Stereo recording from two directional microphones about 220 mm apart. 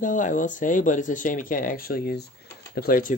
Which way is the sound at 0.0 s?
35° left (ahead or behind).